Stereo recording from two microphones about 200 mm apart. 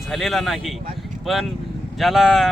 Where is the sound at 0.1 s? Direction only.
Centre (ahead or behind).